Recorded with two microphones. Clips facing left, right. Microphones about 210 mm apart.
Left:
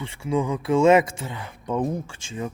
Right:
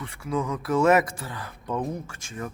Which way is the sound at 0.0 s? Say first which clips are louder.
Left 4 dB; 25° left (ahead or behind).